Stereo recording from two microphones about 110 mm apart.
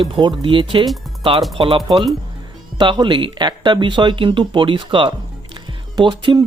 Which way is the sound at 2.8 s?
45° right (ahead or behind).